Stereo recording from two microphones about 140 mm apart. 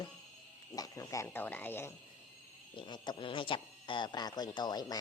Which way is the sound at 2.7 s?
35° left (ahead or behind).